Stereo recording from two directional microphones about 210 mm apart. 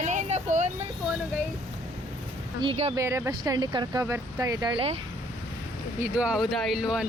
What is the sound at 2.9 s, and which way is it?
Speech, 15° right (ahead or behind).